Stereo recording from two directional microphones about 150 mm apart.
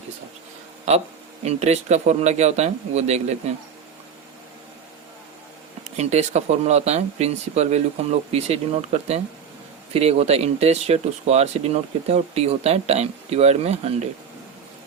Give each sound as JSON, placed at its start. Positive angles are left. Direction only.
{"t": 0.9, "sound": "speech", "side_deg": -50}
{"t": 6.0, "sound": "speech", "side_deg": -50}